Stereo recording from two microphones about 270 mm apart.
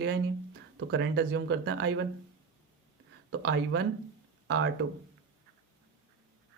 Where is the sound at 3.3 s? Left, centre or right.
Right.